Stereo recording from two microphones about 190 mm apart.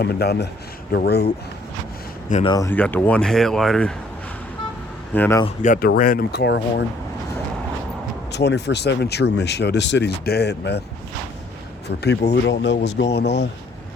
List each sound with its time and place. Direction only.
0.0 s speech: 55° left (ahead or behind)
2.5 s speech: 20° left (ahead or behind)
2.7 s speech: 5° left (ahead or behind)
5.1 s speech: 10° left (ahead or behind)
5.6 s speech: 45° left (ahead or behind); by 6.8 s 65° left (ahead or behind)
8.3 s speech: 60° left (ahead or behind)
11.9 s speech: 65° left (ahead or behind)